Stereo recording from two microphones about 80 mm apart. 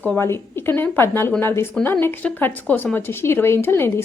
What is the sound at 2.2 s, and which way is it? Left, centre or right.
A woman's voice, centre.